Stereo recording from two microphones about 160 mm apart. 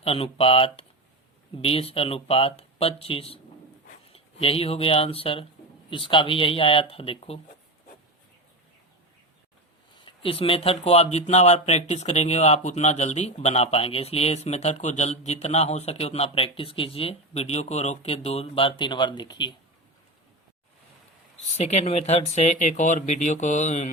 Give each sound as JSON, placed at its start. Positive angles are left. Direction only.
{"t": 0.0, "sound": "speech", "side_deg": 35}
{"t": 10.1, "sound": "speech", "side_deg": 35}
{"t": 21.6, "sound": "speech", "side_deg": 45}